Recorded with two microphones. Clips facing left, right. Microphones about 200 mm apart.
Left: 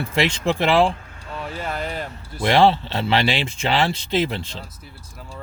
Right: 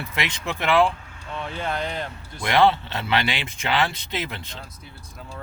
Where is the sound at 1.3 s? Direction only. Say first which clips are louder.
Even; 5° left (ahead or behind).